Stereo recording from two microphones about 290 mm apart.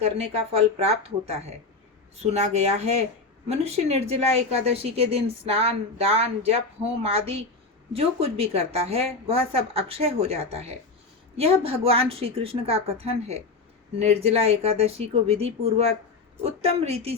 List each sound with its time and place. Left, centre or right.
0.5 s a woman's voice: right